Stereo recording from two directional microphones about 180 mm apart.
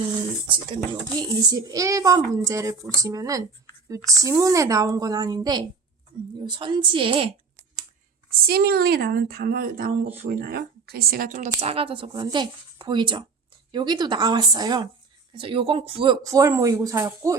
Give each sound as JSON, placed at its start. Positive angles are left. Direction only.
{"t": 0.4, "sound": "a child's voice", "side_deg": -25}
{"t": 8.4, "sound": "a woman's voice", "side_deg": -60}
{"t": 16.2, "sound": "speech", "side_deg": -20}